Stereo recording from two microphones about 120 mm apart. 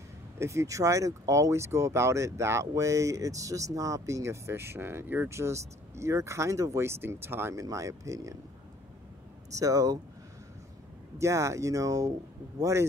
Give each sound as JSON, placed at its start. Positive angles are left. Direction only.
{"t": 0.4, "sound": "speech", "side_deg": -25}
{"t": 9.6, "sound": "speech", "side_deg": -30}
{"t": 11.1, "sound": "speech", "side_deg": -25}